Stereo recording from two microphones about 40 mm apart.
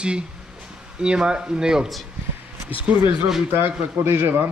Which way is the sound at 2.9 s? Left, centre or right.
Right.